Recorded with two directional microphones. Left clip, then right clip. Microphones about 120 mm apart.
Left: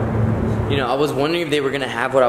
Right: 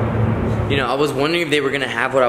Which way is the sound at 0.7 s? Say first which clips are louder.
Right 1 dB; centre (ahead or behind).